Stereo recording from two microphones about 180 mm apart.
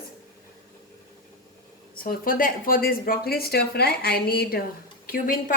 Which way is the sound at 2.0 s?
50° left (ahead or behind).